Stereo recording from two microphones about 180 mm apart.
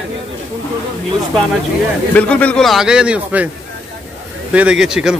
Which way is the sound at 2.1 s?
5° left (ahead or behind).